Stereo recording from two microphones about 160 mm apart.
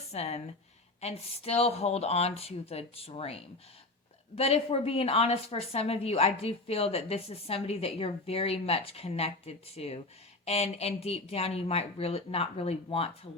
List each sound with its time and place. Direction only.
0.1 s a woman's voice: 40° left (ahead or behind)